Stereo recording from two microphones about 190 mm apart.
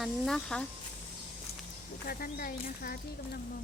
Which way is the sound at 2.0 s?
50° left (ahead or behind).